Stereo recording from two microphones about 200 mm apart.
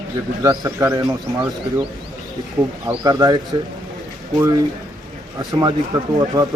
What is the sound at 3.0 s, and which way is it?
Speech, 20° right (ahead or behind).